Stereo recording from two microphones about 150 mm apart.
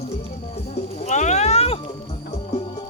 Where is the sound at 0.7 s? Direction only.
50° left (ahead or behind).